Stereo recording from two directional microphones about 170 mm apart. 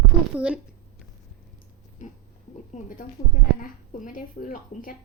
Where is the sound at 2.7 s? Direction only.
50° left (ahead or behind).